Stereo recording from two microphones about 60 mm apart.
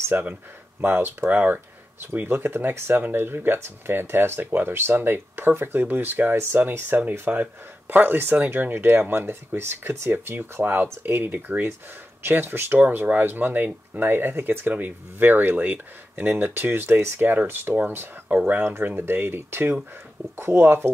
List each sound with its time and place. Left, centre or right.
0.1 s speech: right